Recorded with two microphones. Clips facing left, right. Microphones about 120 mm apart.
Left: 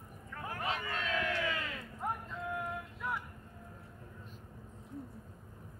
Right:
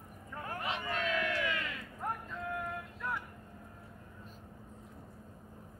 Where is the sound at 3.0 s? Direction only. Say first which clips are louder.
Even; 5° left (ahead or behind).